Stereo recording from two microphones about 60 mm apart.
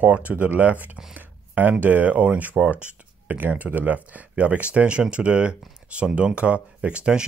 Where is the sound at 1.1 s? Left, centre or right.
Right.